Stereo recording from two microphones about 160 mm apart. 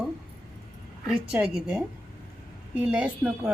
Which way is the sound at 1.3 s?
5° right (ahead or behind).